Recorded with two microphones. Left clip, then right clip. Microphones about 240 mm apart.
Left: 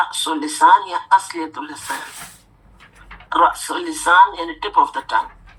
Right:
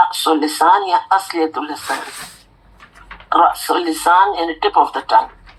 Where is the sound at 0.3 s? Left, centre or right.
Right.